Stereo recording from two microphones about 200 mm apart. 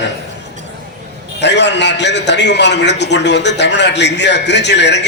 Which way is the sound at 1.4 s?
60° left (ahead or behind).